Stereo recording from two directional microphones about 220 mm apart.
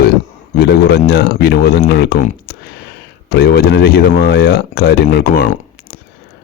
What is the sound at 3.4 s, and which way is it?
Speech, 45° left (ahead or behind).